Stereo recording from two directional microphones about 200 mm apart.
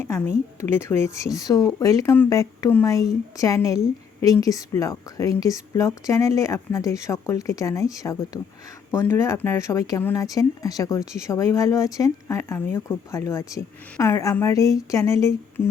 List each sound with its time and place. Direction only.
0.6 s speech: 10° left (ahead or behind)